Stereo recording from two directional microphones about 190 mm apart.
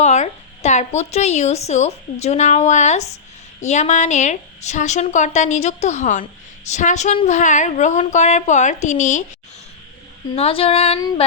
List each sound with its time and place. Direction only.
0.0 s a woman's voice: 35° left (ahead or behind)
10.3 s a woman's voice: 30° left (ahead or behind)